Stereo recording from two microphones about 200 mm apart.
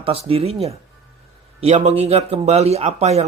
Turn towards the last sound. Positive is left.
turn(degrees=-35)  # may be behind; listen again after turning